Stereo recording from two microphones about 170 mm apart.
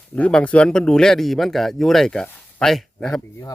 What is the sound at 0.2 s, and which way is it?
Speech, 5° left (ahead or behind).